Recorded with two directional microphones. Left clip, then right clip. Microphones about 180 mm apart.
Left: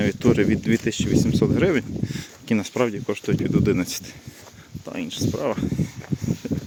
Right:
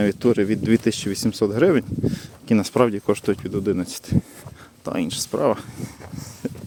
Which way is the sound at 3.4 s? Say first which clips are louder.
Left 2 dB; 5° right (ahead or behind).